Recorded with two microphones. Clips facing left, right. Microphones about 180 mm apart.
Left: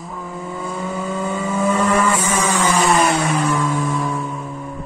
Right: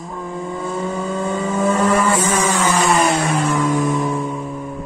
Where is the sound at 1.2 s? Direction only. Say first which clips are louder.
Right 1 dB; 10° right (ahead or behind).